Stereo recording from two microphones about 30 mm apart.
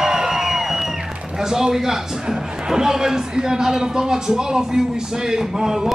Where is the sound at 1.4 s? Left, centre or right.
Centre.